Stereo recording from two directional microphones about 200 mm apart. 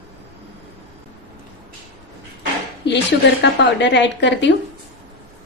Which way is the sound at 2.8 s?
60° left (ahead or behind).